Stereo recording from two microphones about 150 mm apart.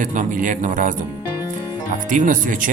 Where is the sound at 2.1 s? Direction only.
60° right (ahead or behind).